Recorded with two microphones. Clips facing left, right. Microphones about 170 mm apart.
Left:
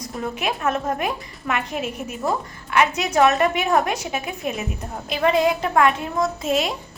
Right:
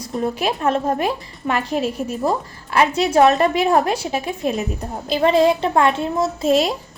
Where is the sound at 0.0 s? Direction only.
30° right (ahead or behind).